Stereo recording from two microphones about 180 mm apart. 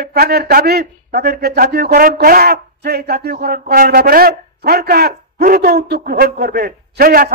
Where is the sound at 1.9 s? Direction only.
50° right (ahead or behind).